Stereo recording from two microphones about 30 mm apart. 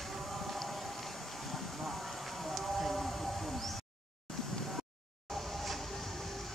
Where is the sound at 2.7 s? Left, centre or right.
Centre.